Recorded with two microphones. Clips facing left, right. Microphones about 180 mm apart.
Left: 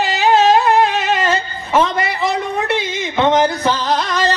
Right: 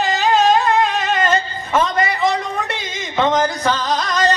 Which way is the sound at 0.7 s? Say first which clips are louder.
Left 3 dB; 65° left (ahead or behind).